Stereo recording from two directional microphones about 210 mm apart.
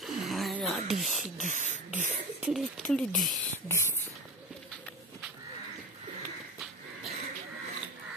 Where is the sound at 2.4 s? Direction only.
Centre (ahead or behind).